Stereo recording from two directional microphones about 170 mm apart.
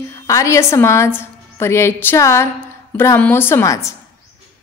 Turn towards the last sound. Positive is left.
turn(degrees=20)  # may be behind; listen again after turning